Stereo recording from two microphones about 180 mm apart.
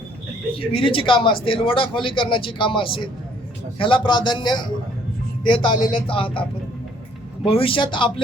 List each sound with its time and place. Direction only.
0.5 s speech: 30° left (ahead or behind)
7.4 s speech: 30° left (ahead or behind)